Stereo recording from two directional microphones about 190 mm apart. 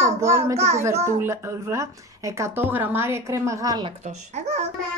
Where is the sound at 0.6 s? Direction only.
35° right (ahead or behind).